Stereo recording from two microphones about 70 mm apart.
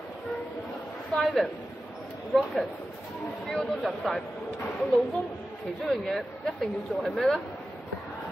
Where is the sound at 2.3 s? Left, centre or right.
Centre.